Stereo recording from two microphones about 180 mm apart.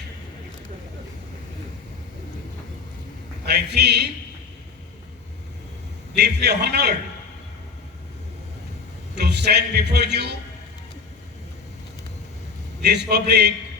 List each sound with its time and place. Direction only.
3.4 s a man's voice: 65° right (ahead or behind)
6.1 s a man's voice: 65° right (ahead or behind)
9.1 s a man's voice: 65° right (ahead or behind)
12.9 s a man's voice: 65° right (ahead or behind)